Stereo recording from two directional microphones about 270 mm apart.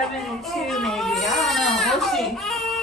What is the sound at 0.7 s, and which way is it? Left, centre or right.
Baby cry, centre.